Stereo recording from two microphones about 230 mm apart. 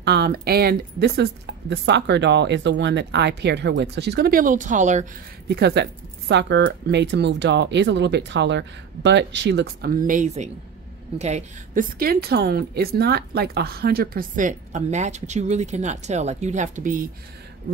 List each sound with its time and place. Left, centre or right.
0.0 s speech: right
5.5 s a woman's voice: right